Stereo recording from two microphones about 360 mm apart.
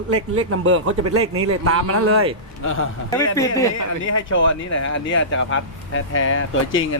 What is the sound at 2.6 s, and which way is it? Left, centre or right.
Speech, left.